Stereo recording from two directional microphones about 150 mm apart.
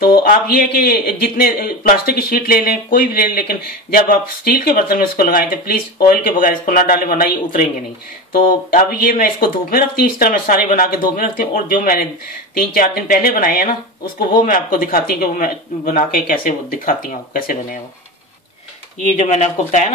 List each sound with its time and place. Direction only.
0.2 s a man's voice: 70° left (ahead or behind)
19.1 s speech: 50° left (ahead or behind)